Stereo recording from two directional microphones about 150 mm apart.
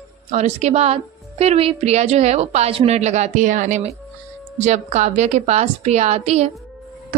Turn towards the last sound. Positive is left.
turn(degrees=-45)  # may be behind; listen again after turning